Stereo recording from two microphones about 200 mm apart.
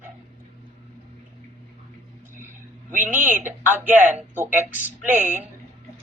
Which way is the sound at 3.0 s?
40° right (ahead or behind).